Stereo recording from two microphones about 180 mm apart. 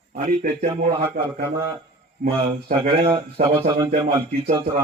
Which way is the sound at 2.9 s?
30° right (ahead or behind).